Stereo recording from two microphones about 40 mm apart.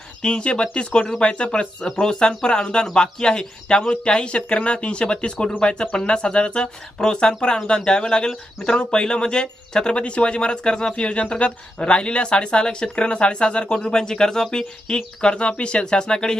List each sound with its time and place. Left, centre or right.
0.2 s speech: left
14.8 s speech: left